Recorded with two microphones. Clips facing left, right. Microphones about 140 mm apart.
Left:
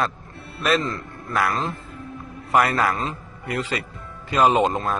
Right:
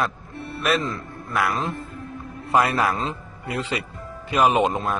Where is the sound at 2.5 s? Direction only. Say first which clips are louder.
Even; 25° right (ahead or behind).